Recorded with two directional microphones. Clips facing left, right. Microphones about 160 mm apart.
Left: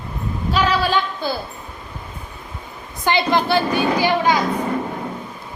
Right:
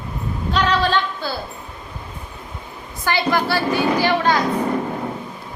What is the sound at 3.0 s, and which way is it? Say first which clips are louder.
A woman's voice: left 2 dB; 20° left (ahead or behind).